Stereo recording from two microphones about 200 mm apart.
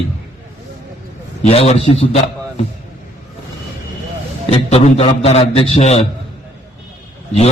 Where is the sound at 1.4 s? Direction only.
30° left (ahead or behind).